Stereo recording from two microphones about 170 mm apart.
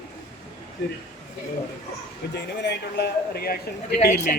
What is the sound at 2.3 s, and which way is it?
Speech, 85° left.